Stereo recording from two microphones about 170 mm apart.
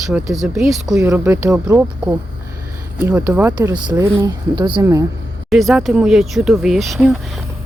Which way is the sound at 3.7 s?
25° right (ahead or behind).